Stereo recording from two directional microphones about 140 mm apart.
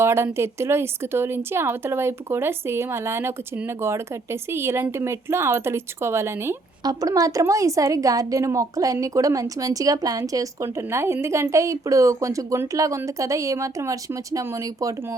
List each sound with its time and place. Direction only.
0.0 s speech: 20° right (ahead or behind)